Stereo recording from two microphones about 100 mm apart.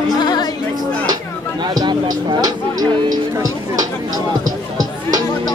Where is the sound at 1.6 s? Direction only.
45° right (ahead or behind).